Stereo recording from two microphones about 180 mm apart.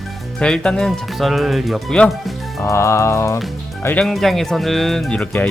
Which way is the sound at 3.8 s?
5° left (ahead or behind).